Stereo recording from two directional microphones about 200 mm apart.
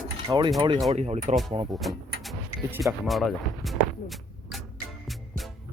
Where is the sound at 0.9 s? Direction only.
35° right (ahead or behind).